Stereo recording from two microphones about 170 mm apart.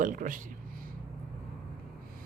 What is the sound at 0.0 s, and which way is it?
Speech, 50° right (ahead or behind).